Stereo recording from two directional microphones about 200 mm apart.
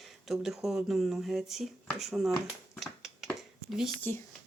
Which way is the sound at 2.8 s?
Centre (ahead or behind).